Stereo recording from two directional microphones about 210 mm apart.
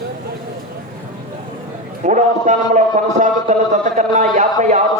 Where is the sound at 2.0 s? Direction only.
35° right (ahead or behind).